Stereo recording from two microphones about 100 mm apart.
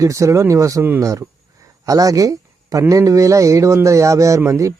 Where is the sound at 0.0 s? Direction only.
30° right (ahead or behind).